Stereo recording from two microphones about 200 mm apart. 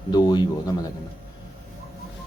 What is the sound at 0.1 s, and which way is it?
Speech, 20° left (ahead or behind).